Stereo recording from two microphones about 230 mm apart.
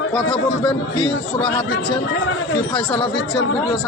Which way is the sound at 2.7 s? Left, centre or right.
Left.